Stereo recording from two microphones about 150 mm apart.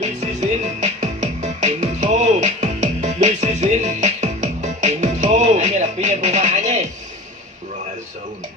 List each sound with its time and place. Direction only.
0.0 s music: 50° right (ahead or behind)